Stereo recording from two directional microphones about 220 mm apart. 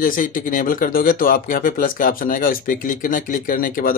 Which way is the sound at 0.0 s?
40° left (ahead or behind).